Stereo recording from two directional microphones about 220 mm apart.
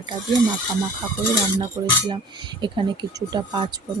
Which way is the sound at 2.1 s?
20° right (ahead or behind).